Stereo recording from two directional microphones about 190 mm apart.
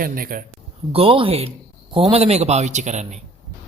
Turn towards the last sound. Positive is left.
turn(degrees=-40)  # may be behind; listen again after turning